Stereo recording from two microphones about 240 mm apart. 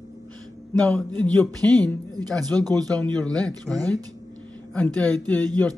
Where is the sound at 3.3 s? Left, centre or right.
Centre.